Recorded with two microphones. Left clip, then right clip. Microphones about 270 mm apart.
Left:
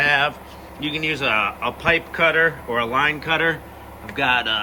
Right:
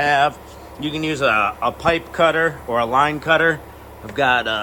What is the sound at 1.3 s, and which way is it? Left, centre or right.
Speech, left.